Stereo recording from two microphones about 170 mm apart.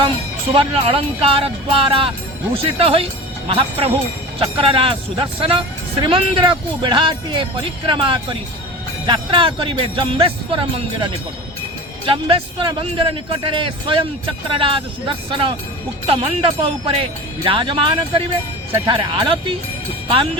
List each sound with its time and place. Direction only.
0.5 s speech: 35° right (ahead or behind)